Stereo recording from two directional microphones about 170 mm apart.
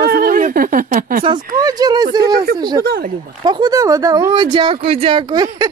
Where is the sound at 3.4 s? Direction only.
25° right (ahead or behind).